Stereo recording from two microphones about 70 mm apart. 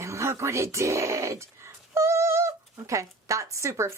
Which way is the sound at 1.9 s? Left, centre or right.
Right.